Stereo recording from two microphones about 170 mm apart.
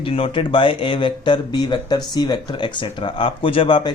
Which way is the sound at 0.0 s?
30° left (ahead or behind).